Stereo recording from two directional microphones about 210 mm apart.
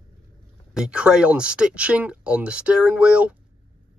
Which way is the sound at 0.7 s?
5° right (ahead or behind).